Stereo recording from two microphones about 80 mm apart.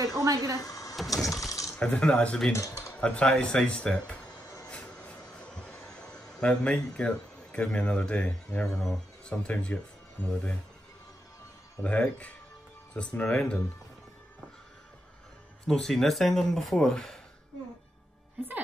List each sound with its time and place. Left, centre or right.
0.0 s speech: right
0.6 s a sound: left
0.9 s a sound: centre
1.3 s mechanisms: left
1.8 s speech: centre
2.5 s speech: left
3.0 s speech: centre
4.6 s a sound: centre
8.6 s speech: centre
11.8 s speech: centre
15.6 s speech: centre